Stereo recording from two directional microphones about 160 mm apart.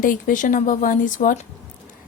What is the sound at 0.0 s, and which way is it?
A woman's voice, 55° left (ahead or behind).